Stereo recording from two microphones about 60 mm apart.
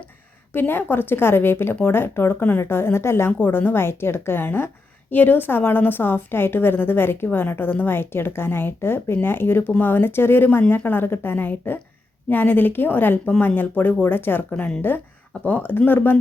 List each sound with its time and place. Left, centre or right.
0.5 s a woman's voice: left
3.3 s a woman's voice: left
14.5 s a woman's voice: centre
14.8 s a woman's voice: left
15.3 s speech: left
15.9 s a woman's voice: left